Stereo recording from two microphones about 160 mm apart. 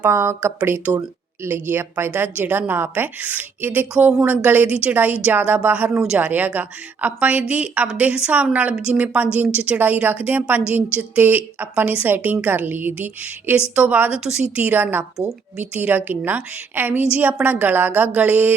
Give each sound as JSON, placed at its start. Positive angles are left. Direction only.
{"t": 0.0, "sound": "a woman's voice", "side_deg": -15}